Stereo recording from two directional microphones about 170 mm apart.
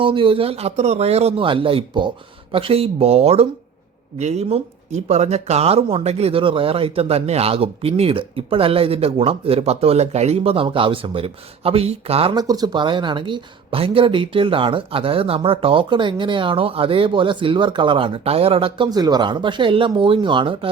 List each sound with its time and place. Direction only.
0.0 s speech: 30° right (ahead or behind)